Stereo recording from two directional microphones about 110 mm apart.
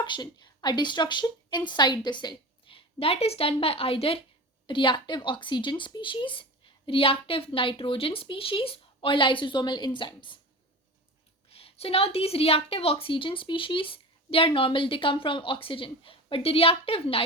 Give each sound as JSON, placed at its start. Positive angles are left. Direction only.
{"t": 0.0, "sound": "a woman's voice", "side_deg": 45}
{"t": 11.4, "sound": "a woman's voice", "side_deg": 60}